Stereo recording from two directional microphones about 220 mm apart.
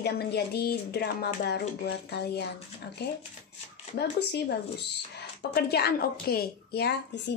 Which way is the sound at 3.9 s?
50° left (ahead or behind).